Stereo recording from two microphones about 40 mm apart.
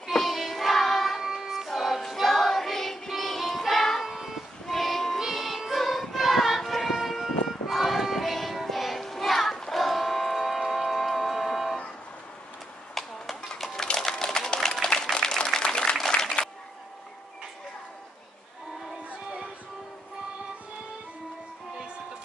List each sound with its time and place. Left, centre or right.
0.1 s music: centre
1.2 s music: centre
1.7 s choir: centre
3.2 s music: centre
4.1 s music: centre
13.9 s a sound: centre